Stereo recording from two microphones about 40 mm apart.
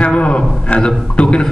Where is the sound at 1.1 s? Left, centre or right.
Left.